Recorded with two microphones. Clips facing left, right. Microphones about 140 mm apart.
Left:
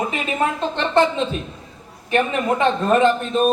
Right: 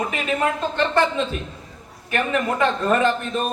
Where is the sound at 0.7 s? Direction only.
20° left (ahead or behind).